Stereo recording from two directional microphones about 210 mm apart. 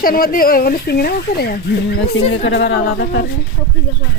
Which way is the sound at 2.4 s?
55° left (ahead or behind).